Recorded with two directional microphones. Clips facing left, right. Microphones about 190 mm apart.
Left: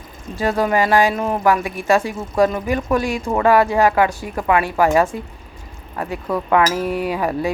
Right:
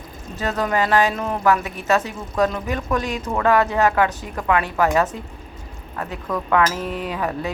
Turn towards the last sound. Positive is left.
turn(degrees=10)  # may be behind; listen again after turning